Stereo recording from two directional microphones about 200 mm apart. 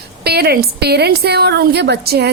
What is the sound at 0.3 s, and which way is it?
A woman's voice, 50° right (ahead or behind).